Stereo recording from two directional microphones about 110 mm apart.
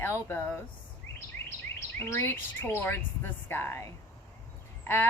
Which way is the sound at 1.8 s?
25° left (ahead or behind).